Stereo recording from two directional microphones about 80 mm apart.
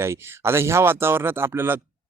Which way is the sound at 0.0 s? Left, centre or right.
Right.